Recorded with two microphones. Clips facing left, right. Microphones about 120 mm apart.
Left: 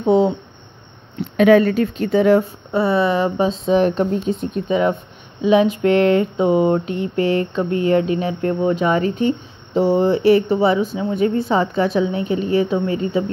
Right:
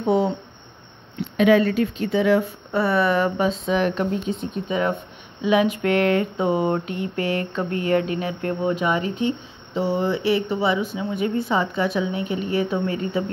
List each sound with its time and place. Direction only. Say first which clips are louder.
0.0 s a sound: left 5 dB; 25° left (ahead or behind)
1.3 s speech: left 4 dB; 45° left (ahead or behind)
2.7 s speech: left 3 dB; 20° left (ahead or behind); by 9.3 s 40° left (ahead or behind)
9.8 s speech: left 7 dB; 50° left (ahead or behind); by 13.2 s 25° left (ahead or behind)